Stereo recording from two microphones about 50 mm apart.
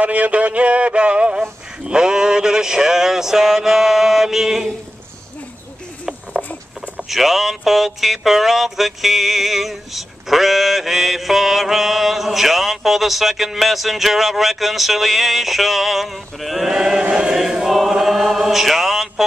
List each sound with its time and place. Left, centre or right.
0.0 s a sound: right; by 4.6 s centre
6.4 s patter: centre
7.1 s speech: centre